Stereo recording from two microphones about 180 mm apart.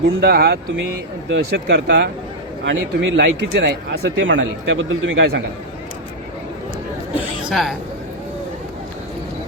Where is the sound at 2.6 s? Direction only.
80° right.